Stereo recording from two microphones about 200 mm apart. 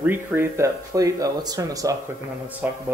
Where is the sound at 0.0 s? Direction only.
10° right (ahead or behind).